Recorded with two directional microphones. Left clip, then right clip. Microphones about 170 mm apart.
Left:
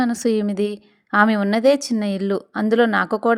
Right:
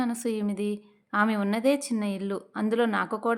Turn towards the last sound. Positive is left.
turn(degrees=40)  # may be behind; listen again after turning